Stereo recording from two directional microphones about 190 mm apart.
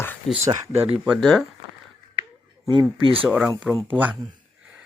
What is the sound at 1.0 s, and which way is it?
Speech, centre (ahead or behind).